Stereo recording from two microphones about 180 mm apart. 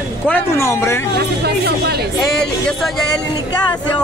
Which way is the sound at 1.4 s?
65° right (ahead or behind).